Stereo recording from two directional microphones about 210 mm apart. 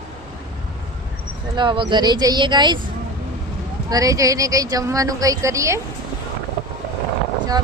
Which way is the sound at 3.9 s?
15° right (ahead or behind).